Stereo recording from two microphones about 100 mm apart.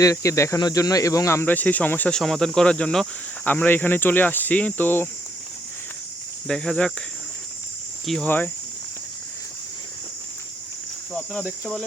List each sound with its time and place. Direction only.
0.0 s speech: 30° left (ahead or behind); by 2.1 s 15° left (ahead or behind)
2.1 s speech: 5° left (ahead or behind)
6.5 s speech: 5° left (ahead or behind)
8.0 s speech: centre (ahead or behind)
11.6 s speech: 10° left (ahead or behind)